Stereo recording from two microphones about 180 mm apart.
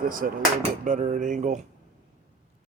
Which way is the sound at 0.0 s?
50° right (ahead or behind).